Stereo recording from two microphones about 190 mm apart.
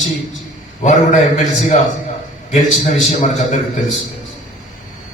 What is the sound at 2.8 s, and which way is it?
Speech, 40° left (ahead or behind).